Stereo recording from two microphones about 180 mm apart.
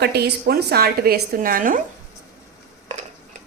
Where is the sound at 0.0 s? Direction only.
65° right (ahead or behind); by 1.8 s 50° right (ahead or behind).